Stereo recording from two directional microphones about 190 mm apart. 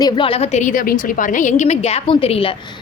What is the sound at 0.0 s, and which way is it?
A woman's voice, 25° left (ahead or behind).